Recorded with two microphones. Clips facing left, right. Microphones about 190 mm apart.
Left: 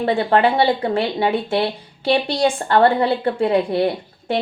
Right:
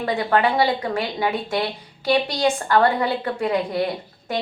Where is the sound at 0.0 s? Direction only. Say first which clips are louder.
Left 4 dB; 30° left (ahead or behind).